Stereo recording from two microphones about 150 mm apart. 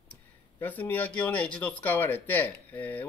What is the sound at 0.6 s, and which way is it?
Speech, 10° left (ahead or behind).